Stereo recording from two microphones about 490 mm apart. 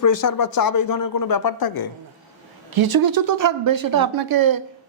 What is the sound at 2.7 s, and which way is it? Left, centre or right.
Speech, right.